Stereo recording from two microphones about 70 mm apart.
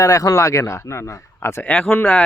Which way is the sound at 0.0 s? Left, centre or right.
Left.